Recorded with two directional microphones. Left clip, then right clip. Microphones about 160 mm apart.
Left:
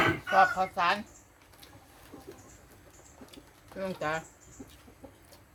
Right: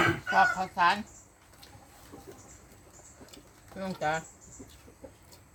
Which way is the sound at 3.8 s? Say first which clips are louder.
Right 1 dB; 25° left (ahead or behind).